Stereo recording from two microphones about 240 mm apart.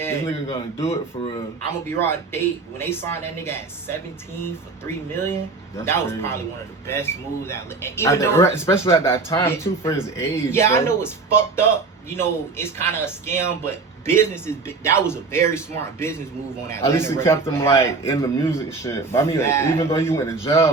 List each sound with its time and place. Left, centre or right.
0.3 s a man's voice: left
2.0 s speech: centre